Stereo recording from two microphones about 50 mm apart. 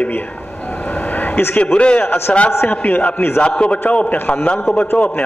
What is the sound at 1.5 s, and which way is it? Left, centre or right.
Speech, left.